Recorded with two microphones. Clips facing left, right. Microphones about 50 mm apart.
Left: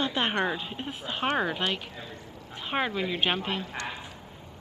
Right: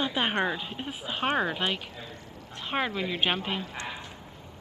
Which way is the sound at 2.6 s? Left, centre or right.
Centre.